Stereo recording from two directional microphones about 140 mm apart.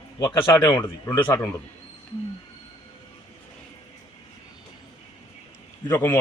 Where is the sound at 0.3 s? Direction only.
30° left (ahead or behind).